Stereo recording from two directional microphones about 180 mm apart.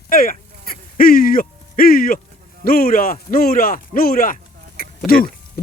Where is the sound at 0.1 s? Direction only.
55° left (ahead or behind).